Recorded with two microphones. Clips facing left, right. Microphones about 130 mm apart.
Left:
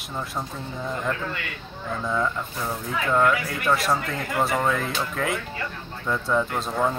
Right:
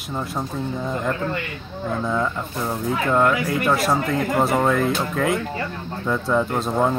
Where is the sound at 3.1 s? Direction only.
15° right (ahead or behind).